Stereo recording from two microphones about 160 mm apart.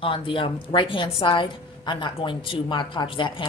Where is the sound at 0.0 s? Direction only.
30° left (ahead or behind).